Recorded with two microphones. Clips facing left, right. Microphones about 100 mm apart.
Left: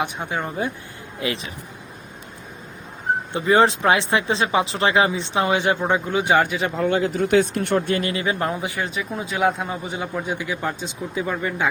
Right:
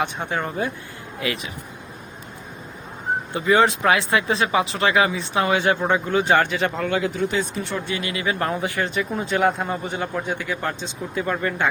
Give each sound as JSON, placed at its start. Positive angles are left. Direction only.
{"t": 0.0, "sound": "a man's voice", "side_deg": 10}
{"t": 1.2, "sound": "speech", "side_deg": 25}
{"t": 3.3, "sound": "a man's voice", "side_deg": 30}
{"t": 6.8, "sound": "speech", "side_deg": 30}
{"t": 7.2, "sound": "speech", "side_deg": 65}
{"t": 8.1, "sound": "speech", "side_deg": 30}
{"t": 8.8, "sound": "a man's voice", "side_deg": 5}